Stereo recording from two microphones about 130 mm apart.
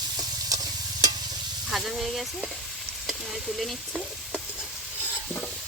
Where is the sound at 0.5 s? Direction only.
25° right (ahead or behind).